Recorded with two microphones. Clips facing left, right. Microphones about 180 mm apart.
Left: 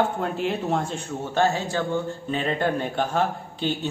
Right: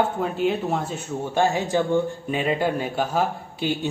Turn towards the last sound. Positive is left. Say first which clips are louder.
# right 1 dB
turn(degrees=-10)  # may be behind; listen again after turning